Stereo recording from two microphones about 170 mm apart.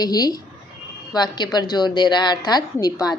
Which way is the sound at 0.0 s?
20° left (ahead or behind).